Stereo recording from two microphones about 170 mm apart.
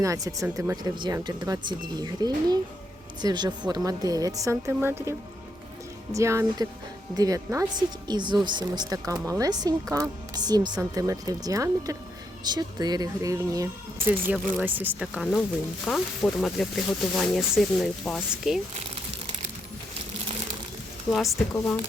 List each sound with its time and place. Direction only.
0.0 s speech: 20° right (ahead or behind); by 18.6 s centre (ahead or behind)
21.1 s speech: centre (ahead or behind)